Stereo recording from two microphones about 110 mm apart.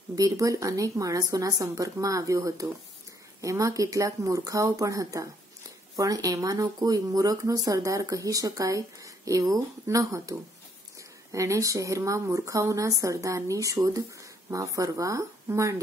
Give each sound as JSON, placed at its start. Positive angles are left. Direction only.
{"t": 0.1, "sound": "speech", "side_deg": -30}
{"t": 11.3, "sound": "speech", "side_deg": -30}